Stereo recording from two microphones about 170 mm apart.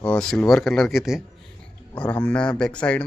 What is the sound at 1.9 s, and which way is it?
Speech, 10° left (ahead or behind).